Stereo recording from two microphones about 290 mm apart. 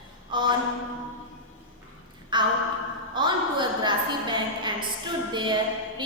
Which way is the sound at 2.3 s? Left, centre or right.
Centre.